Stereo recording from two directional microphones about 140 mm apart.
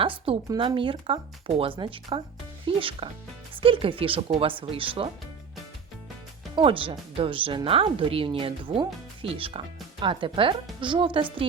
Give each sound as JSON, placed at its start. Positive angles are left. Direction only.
{"t": 0.0, "sound": "speech", "side_deg": -40}
{"t": 6.6, "sound": "speech", "side_deg": -40}